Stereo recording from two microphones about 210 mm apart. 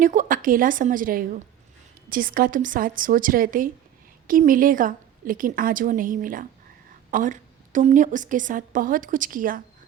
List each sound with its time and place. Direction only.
0.0 s a woman's voice: 40° right (ahead or behind)